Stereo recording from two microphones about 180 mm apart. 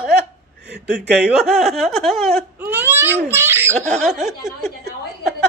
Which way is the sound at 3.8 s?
5° left (ahead or behind).